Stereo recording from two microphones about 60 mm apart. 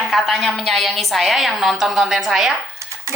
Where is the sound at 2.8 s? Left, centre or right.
Right.